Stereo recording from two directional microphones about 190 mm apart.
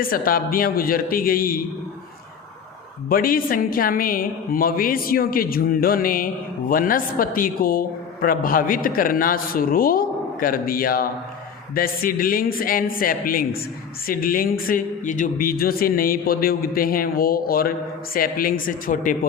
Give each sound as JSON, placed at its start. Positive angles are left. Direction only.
{"t": 0.0, "sound": "a woman's voice", "side_deg": 50}
{"t": 3.1, "sound": "a woman's voice", "side_deg": 50}